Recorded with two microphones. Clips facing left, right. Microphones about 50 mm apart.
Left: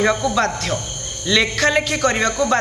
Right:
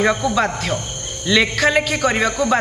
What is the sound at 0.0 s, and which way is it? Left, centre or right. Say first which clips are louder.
A man's voice: even; centre.